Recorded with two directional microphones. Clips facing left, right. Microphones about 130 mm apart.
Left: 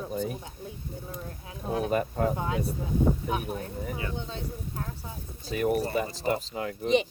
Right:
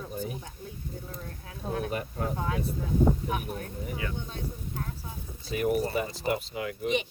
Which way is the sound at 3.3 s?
30° left (ahead or behind).